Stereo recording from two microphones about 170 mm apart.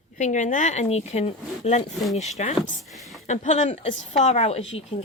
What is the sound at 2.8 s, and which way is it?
Speech, centre (ahead or behind).